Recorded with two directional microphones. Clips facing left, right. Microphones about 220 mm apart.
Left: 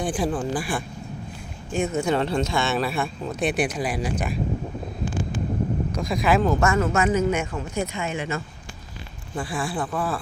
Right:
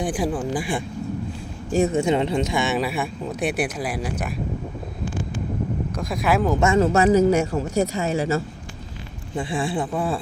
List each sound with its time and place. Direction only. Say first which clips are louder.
0.0 s speech: right 1 dB; 10° right (ahead or behind)
1.7 s speech: right 5 dB; 35° right (ahead or behind)
2.0 s speech: right 2 dB; 20° right (ahead or behind); by 4.4 s 5° right (ahead or behind)
5.9 s speech: even; 5° right (ahead or behind)
6.6 s speech: right 3 dB; 25° right (ahead or behind)
6.8 s speech: right 5 dB; 35° right (ahead or behind)
9.3 s speech: right 3 dB; 25° right (ahead or behind)